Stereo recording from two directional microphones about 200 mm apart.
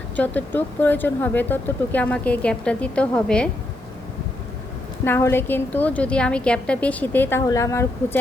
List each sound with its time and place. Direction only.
0.2 s speech: 10° left (ahead or behind)
5.0 s speech: 10° left (ahead or behind)